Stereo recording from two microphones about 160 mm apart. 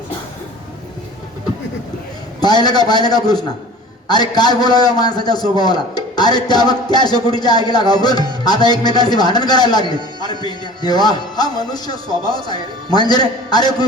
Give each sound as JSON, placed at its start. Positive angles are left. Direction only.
{"t": 2.4, "sound": "speech", "side_deg": 25}